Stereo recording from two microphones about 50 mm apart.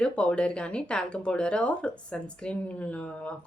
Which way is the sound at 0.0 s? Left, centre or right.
Centre.